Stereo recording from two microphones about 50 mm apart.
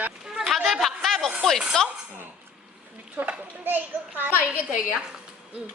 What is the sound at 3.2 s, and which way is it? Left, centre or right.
A child's voice, right.